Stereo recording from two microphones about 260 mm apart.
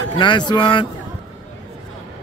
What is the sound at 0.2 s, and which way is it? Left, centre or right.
Speech, centre.